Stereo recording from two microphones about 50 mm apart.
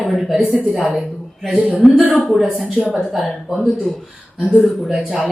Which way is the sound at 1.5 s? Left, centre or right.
Right.